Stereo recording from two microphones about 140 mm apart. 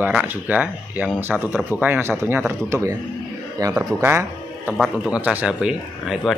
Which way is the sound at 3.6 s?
30° right (ahead or behind).